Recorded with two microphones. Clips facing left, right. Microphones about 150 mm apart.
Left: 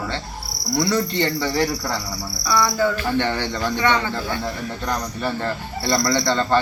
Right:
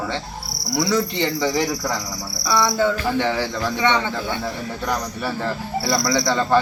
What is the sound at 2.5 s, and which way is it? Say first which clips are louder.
Cricket: right 1 dB; 20° right (ahead or behind).